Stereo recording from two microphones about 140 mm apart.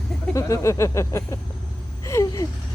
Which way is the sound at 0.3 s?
20° left (ahead or behind).